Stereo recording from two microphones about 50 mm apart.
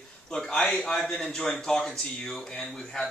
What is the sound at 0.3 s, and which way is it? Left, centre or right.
Speech, centre.